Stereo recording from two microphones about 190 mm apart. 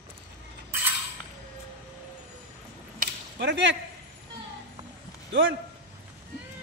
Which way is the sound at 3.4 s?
70° right (ahead or behind).